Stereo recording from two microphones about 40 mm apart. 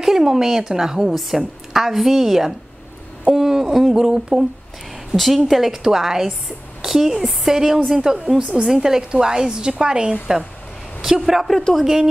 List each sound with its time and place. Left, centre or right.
0.0 s a woman's voice: centre
5.1 s a woman's voice: centre; by 10.1 s right
11.0 s a woman's voice: centre